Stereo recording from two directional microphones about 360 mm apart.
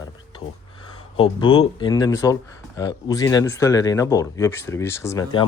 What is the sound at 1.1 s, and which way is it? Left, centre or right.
Speech, centre.